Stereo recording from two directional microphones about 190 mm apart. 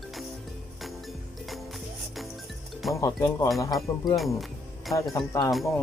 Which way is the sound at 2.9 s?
15° left (ahead or behind).